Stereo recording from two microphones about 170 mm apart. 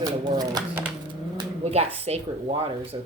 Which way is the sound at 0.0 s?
25° right (ahead or behind).